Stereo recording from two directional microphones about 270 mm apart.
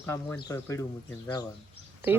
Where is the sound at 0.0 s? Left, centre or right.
Centre.